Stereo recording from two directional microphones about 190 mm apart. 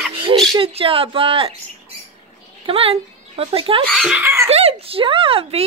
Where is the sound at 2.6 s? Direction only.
30° right (ahead or behind).